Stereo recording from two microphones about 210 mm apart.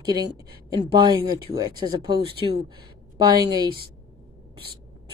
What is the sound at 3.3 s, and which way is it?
Speech, 20° right (ahead or behind).